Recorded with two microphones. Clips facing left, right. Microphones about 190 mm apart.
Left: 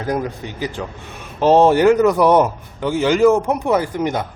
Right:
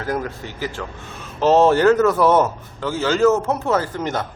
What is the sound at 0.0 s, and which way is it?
A man's voice, 15° left (ahead or behind).